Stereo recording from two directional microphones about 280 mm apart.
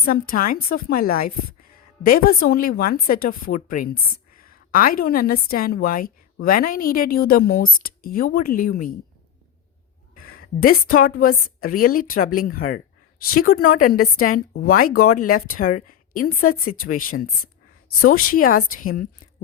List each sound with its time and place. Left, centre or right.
0.0 s a woman's voice: left
10.6 s a woman's voice: left